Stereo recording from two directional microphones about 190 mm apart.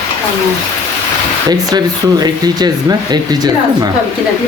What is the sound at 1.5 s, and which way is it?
Speech, 20° right (ahead or behind).